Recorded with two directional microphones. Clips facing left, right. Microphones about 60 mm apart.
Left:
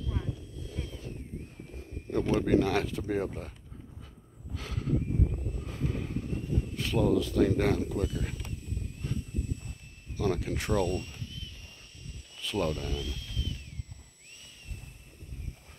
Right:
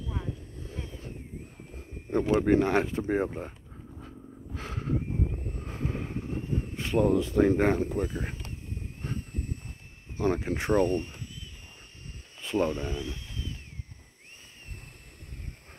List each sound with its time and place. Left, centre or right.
0.0 s vehicle: centre
2.4 s speech: right
4.6 s a sound: right
9.0 s vehicle: right
10.1 s speech: right
12.4 s a sound: right